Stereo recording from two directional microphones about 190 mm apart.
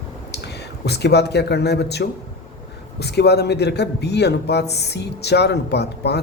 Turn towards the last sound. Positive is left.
turn(degrees=60)  # may be behind; listen again after turning